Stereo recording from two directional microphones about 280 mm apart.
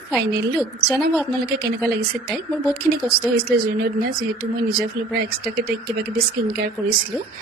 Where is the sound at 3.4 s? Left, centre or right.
Right.